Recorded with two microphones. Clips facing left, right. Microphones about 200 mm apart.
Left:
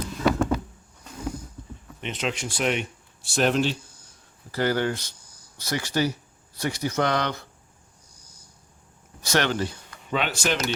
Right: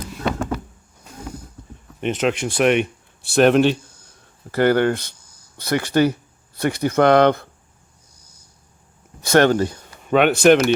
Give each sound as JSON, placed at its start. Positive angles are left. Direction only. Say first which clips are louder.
{"t": 2.0, "sound": "speech", "louder": "right 9 dB", "side_deg": -50}
{"t": 9.2, "sound": "speech", "louder": "right 9 dB", "side_deg": -50}